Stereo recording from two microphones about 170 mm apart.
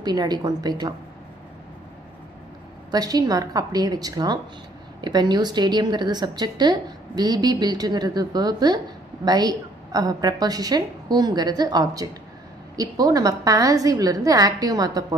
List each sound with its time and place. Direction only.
0.0 s a woman's voice: 25° right (ahead or behind)
2.9 s a woman's voice: 20° right (ahead or behind)